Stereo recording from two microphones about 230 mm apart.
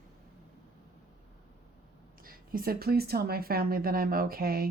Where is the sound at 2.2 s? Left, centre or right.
Right.